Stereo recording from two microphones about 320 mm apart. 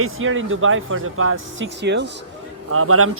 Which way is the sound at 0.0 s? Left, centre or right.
Right.